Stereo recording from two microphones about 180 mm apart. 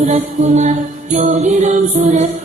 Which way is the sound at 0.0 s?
40° right (ahead or behind).